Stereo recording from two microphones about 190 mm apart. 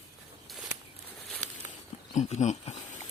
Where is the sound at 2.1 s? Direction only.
35° left (ahead or behind).